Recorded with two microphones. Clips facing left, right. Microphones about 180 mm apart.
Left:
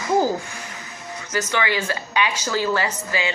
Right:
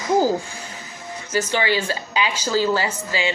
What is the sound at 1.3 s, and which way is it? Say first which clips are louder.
Speech: right 2 dB; 30° right (ahead or behind).